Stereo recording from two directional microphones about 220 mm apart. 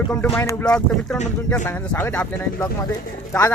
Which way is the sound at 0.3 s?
5° left (ahead or behind).